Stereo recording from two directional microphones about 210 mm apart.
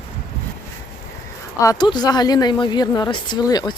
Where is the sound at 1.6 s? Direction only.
15° left (ahead or behind).